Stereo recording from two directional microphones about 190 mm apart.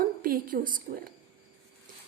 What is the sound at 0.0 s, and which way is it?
A woman's voice, 50° right (ahead or behind).